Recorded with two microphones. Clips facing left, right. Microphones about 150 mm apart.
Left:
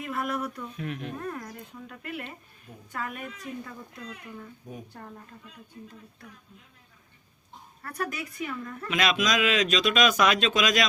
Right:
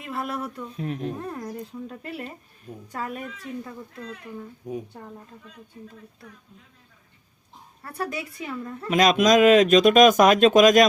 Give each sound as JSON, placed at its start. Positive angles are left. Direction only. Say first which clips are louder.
{"t": 0.0, "sound": "speech", "louder": "even", "side_deg": -25}
{"t": 4.9, "sound": "speech", "louder": "right 2 dB", "side_deg": -20}
{"t": 7.8, "sound": "speech", "louder": "right 3 dB", "side_deg": -25}
{"t": 8.9, "sound": "speech", "louder": "right 9 dB", "side_deg": -45}